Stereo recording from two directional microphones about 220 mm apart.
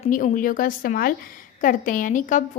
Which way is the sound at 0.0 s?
35° left (ahead or behind).